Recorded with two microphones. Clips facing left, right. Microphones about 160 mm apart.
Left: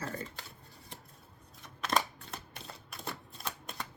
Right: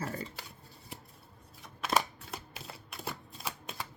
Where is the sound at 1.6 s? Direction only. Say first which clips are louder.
Right 1 dB; 5° right (ahead or behind).